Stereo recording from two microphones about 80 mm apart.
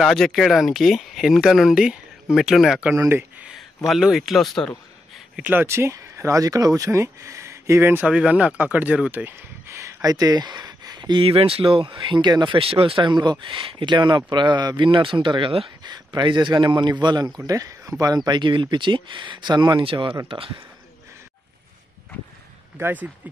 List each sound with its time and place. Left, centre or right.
0.0 s speech: centre
3.1 s speech: right
3.4 s a sound: centre
5.4 s speech: right
8.0 s speech: centre
9.2 s speech: right
17.5 s speech: right
22.8 s speech: right